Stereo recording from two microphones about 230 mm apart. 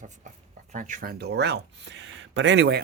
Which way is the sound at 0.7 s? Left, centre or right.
Right.